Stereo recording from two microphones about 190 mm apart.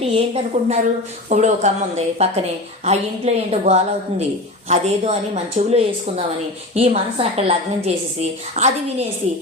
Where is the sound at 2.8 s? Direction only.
35° right (ahead or behind).